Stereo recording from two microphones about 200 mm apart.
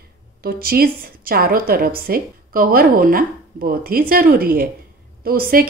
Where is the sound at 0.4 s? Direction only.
50° right (ahead or behind).